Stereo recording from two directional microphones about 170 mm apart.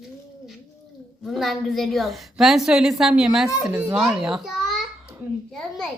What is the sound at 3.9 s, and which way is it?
Babbling, centre (ahead or behind).